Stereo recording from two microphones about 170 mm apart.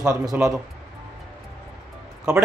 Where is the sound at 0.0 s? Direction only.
20° right (ahead or behind).